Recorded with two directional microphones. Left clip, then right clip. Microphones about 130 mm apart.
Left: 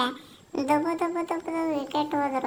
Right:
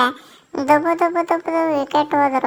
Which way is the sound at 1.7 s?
35° right (ahead or behind).